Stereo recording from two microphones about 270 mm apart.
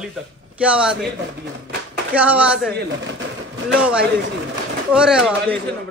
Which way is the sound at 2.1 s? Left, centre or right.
Centre.